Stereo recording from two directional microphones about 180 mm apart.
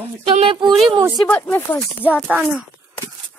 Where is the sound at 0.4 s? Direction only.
30° right (ahead or behind).